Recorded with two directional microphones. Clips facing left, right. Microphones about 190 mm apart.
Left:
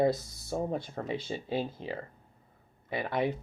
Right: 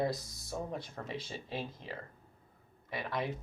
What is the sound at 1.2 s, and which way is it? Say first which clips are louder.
Speech: left 8 dB; 25° left (ahead or behind).